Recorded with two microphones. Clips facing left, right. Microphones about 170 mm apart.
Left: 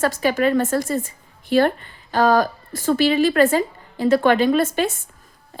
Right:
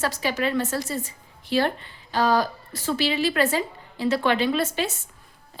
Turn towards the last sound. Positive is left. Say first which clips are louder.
# left 6 dB
turn(degrees=50)  # may be behind; listen again after turning